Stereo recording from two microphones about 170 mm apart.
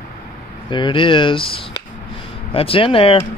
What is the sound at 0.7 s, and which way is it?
Speech, 30° left (ahead or behind).